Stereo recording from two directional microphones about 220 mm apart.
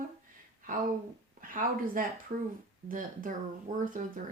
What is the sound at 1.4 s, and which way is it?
Speech, 40° right (ahead or behind).